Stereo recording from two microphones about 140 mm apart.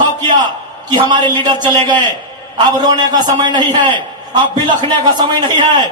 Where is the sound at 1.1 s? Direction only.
35° right (ahead or behind).